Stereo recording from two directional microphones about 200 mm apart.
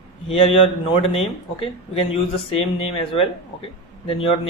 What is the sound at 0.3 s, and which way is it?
Speech, 30° left (ahead or behind).